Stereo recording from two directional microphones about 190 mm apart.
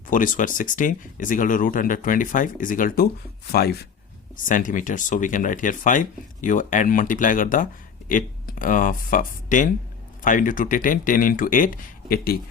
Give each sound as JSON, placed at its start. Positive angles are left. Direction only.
{"t": 0.1, "sound": "speech", "side_deg": 45}
{"t": 4.4, "sound": "speech", "side_deg": 45}